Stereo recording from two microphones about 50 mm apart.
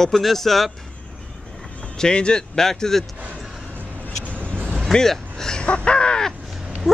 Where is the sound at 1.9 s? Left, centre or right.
Centre.